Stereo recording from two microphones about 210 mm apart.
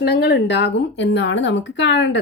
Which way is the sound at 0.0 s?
55° left (ahead or behind).